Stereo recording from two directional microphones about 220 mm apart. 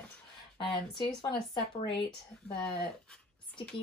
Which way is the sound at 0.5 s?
20° left (ahead or behind).